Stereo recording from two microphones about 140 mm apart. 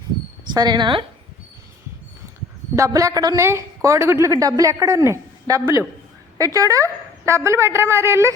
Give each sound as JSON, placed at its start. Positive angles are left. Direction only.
{"t": 0.5, "sound": "speech", "side_deg": -30}
{"t": 2.7, "sound": "a woman's voice", "side_deg": -25}